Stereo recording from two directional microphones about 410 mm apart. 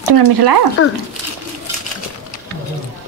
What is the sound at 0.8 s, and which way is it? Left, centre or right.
Speech, left.